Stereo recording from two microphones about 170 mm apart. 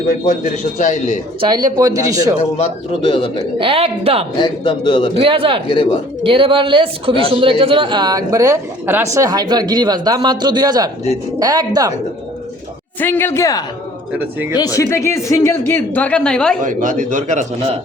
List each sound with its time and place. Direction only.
0.8 s a man's voice: 50° left (ahead or behind)
1.4 s speech: 25° right (ahead or behind)
2.6 s a man's voice: 30° left (ahead or behind)
3.6 s a woman's voice: 35° right (ahead or behind)
4.4 s a man's voice: 30° left (ahead or behind)
5.1 s a woman's voice: 30° right (ahead or behind)
5.6 s a man's voice: 30° left (ahead or behind)
6.2 s speech: 30° right (ahead or behind)
13.0 s speech: 10° left (ahead or behind)
16.6 s a man's voice: 50° right (ahead or behind)